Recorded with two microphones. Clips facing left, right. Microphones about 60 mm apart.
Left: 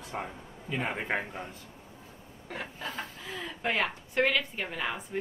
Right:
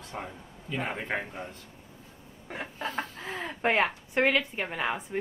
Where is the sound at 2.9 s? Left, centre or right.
Right.